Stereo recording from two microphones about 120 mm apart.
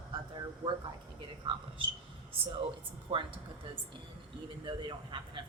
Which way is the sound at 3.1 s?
45° right (ahead or behind).